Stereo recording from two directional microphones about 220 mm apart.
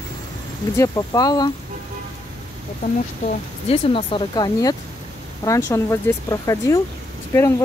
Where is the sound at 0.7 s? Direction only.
15° left (ahead or behind).